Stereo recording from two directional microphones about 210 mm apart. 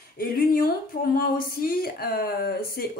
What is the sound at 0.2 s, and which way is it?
A woman's voice, 45° left (ahead or behind).